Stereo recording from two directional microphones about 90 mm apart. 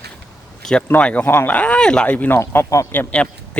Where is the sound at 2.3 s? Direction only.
30° left (ahead or behind).